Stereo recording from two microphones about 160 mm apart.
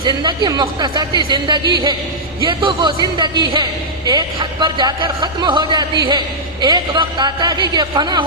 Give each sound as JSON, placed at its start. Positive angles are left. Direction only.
{"t": 0.0, "sound": "speech", "side_deg": -25}